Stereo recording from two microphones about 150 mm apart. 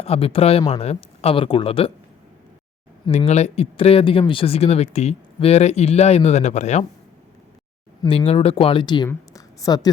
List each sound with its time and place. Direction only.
0.0 s speech: 40° left (ahead or behind)
3.1 s speech: 45° left (ahead or behind)
8.0 s a woman's voice: 35° left (ahead or behind)